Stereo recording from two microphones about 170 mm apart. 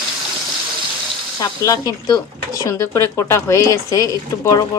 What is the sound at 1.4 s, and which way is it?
A woman's voice, 20° left (ahead or behind).